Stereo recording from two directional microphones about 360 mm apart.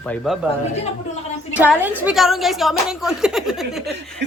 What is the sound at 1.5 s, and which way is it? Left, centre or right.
A woman's voice, centre.